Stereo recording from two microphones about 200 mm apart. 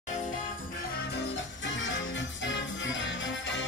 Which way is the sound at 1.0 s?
60° left (ahead or behind).